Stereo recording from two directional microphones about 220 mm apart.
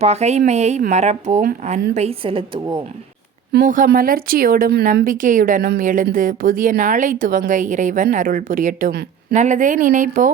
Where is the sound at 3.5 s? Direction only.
40° right (ahead or behind).